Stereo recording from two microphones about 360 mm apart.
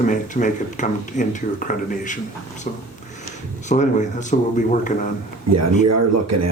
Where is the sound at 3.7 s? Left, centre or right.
Centre.